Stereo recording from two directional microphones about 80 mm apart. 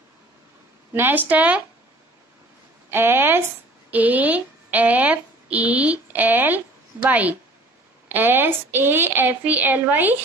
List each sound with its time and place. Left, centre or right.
0.9 s a woman's voice: right
2.9 s a woman's voice: right